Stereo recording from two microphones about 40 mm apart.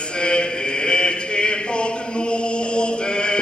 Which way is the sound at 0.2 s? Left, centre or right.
Left.